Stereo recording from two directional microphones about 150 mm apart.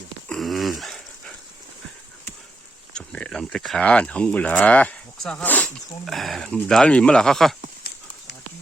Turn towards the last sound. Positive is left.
turn(degrees=0)  # may be behind; listen again after turning